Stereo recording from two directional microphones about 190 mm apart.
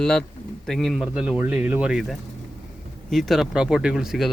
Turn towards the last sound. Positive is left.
turn(degrees=0)  # may be behind; listen again after turning